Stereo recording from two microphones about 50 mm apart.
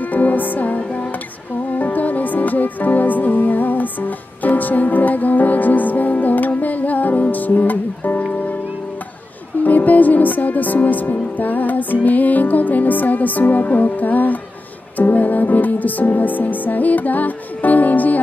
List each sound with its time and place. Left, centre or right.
0.1 s music: left
9.6 s music: left